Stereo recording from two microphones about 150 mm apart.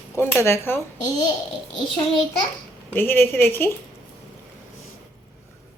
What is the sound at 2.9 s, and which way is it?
Speech, 15° left (ahead or behind).